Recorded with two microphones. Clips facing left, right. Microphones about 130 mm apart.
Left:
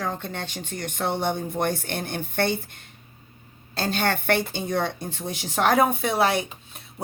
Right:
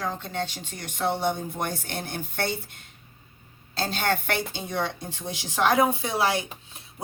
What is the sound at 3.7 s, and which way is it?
A woman's voice, 55° left (ahead or behind).